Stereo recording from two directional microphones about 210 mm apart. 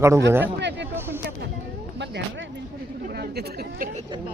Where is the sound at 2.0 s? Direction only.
55° right (ahead or behind).